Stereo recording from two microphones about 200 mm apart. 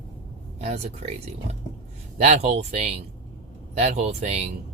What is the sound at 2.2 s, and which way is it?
Speech, 35° right (ahead or behind).